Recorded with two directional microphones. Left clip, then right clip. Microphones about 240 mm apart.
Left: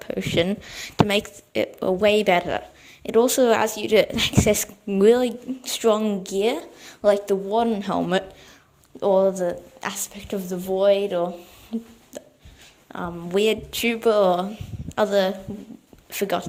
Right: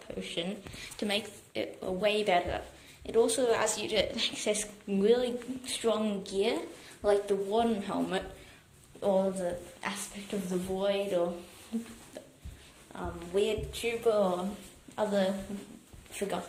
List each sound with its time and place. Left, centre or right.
0.1 s speech: left
12.1 s hiccup: left
12.9 s speech: left